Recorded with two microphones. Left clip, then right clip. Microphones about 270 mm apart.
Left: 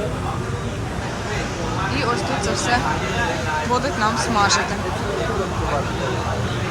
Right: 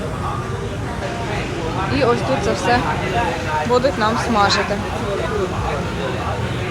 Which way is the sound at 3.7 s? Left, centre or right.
Centre.